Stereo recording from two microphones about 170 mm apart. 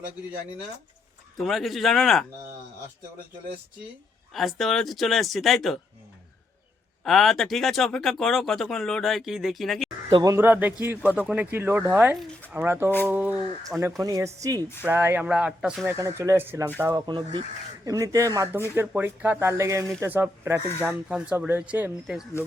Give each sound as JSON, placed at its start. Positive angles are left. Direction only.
{"t": 1.4, "sound": "speech", "side_deg": 0}
{"t": 4.3, "sound": "speech", "side_deg": 0}
{"t": 7.0, "sound": "speech", "side_deg": 0}
{"t": 10.1, "sound": "speech", "side_deg": -30}
{"t": 10.3, "sound": "speech", "side_deg": -10}
{"t": 16.0, "sound": "speech", "side_deg": -20}
{"t": 16.9, "sound": "speech", "side_deg": -30}